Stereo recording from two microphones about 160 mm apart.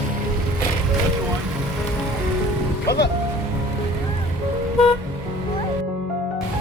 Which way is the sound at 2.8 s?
90° left.